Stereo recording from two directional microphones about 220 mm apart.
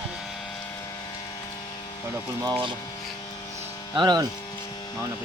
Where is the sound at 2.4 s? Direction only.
15° right (ahead or behind).